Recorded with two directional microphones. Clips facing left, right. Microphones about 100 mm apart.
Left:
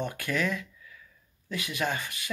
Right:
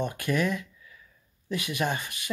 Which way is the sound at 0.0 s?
20° right (ahead or behind).